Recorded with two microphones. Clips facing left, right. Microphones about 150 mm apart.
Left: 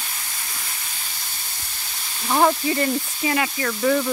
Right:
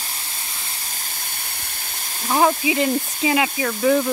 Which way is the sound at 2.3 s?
5° right (ahead or behind).